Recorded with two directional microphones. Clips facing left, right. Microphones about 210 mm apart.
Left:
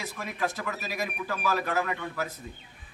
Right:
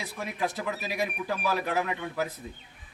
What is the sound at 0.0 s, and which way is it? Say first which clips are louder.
A man's voice: even; 15° right (ahead or behind).